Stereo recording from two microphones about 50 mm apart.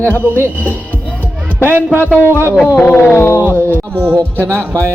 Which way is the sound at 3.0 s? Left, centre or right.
Left.